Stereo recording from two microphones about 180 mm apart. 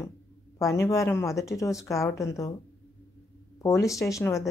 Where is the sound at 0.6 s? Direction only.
15° left (ahead or behind).